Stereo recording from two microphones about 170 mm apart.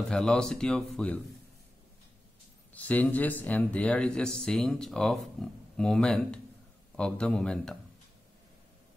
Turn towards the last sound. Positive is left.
turn(degrees=5)  # may be behind; listen again after turning